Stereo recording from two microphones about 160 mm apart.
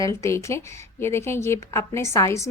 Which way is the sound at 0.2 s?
15° left (ahead or behind).